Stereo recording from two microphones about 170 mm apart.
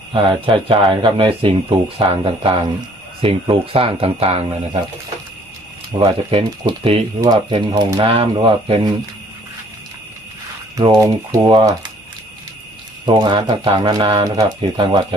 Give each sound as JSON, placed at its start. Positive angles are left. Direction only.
{"t": 0.1, "sound": "speech", "side_deg": -30}
{"t": 6.0, "sound": "speech", "side_deg": -30}
{"t": 10.8, "sound": "speech", "side_deg": -20}
{"t": 13.1, "sound": "speech", "side_deg": -30}